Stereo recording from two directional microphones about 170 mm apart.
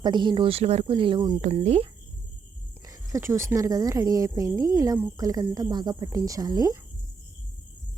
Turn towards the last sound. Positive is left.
turn(degrees=-25)  # may be behind; listen again after turning